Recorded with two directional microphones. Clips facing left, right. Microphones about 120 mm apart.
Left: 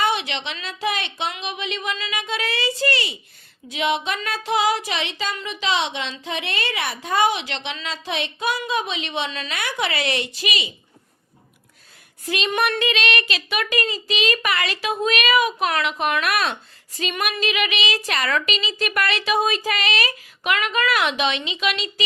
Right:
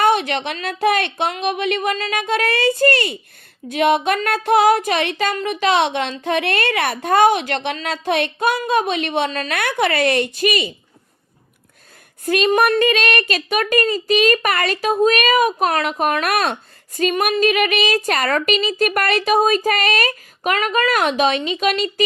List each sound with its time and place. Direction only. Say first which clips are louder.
0.0 s a woman's voice: right 6 dB; 50° right (ahead or behind)
12.2 s a woman's voice: right 7 dB; 50° right (ahead or behind)